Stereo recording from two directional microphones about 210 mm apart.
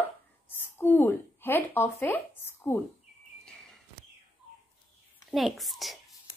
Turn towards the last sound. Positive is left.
turn(degrees=0)  # may be behind; listen again after turning